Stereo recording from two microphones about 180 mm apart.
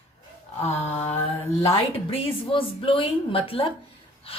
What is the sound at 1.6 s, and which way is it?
A woman's voice, 30° left (ahead or behind).